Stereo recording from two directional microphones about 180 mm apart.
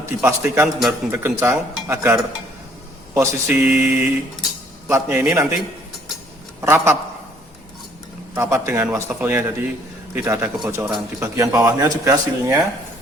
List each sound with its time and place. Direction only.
0.0 s speech: 15° right (ahead or behind)
3.2 s speech: 10° right (ahead or behind)
6.6 s speech: 15° right (ahead or behind)
8.4 s speech: 15° right (ahead or behind)